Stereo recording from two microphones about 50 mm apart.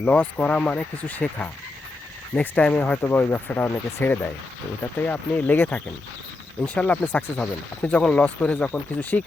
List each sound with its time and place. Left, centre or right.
0.0 s speech: left
2.6 s speech: left
3.0 s speech: left